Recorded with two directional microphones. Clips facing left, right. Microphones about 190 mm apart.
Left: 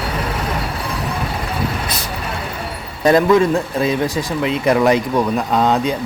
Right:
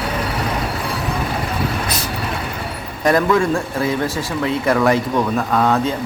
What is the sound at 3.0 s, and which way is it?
Speech, 20° left (ahead or behind).